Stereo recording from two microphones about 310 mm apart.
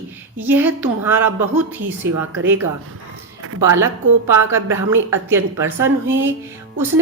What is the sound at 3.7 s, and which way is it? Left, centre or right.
A woman's voice, centre.